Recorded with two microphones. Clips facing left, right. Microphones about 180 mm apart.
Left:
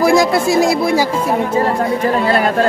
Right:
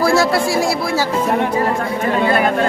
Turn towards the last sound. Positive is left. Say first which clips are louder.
# left 4 dB
turn(degrees=20)  # may be behind; listen again after turning